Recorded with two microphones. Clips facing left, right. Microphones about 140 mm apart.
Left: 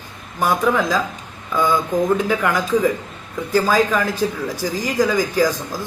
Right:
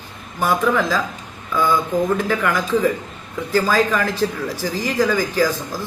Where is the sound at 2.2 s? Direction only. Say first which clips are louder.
Left 1 dB; 10° left (ahead or behind).